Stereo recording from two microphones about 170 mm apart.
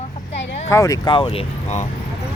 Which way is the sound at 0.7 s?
20° left (ahead or behind).